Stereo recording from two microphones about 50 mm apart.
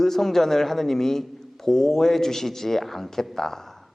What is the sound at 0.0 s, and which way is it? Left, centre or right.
A man's voice, centre.